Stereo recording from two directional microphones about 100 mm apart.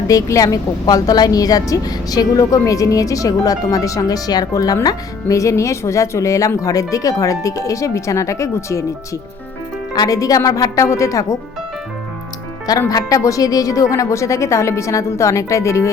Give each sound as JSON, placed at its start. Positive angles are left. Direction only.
{"t": 0.1, "sound": "speech", "side_deg": 35}
{"t": 9.9, "sound": "speech", "side_deg": 40}
{"t": 12.9, "sound": "speech", "side_deg": 35}